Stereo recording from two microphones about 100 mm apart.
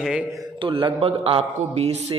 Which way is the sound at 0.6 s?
55° right (ahead or behind).